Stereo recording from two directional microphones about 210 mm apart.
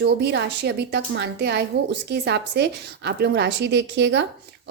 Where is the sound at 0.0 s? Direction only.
55° right (ahead or behind).